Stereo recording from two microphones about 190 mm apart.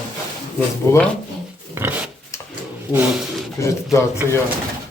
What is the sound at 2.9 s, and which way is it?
Speech, 10° right (ahead or behind).